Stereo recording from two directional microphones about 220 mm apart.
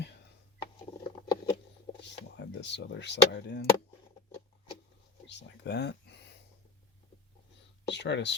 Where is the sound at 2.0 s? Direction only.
55° left (ahead or behind).